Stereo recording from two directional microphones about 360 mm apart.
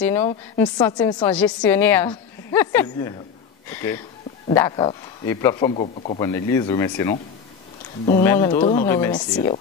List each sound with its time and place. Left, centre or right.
0.0 s a woman's voice: centre